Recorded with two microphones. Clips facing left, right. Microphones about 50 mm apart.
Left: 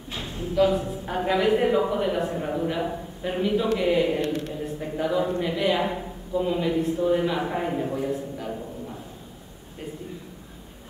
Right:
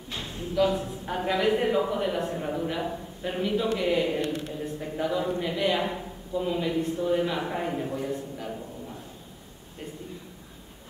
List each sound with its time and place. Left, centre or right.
0.1 s a man's voice: centre